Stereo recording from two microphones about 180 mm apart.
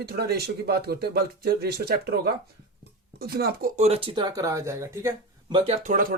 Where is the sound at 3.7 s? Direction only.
35° right (ahead or behind).